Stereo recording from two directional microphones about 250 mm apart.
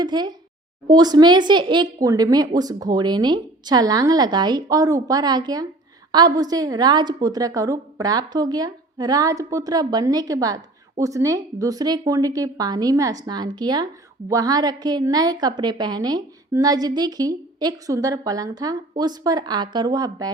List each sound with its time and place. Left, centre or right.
0.0 s a woman's voice: centre